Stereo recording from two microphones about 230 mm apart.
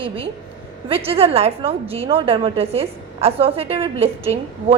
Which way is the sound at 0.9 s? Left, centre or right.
Right.